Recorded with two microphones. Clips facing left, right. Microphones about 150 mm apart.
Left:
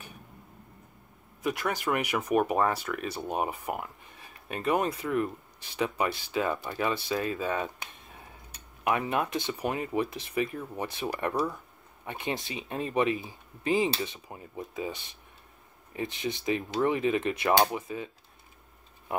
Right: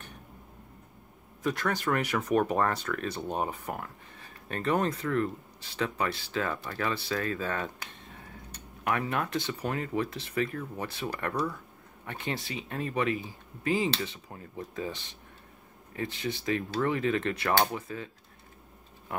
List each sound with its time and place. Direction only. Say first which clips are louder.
1.4 s speech: even; 10° left (ahead or behind)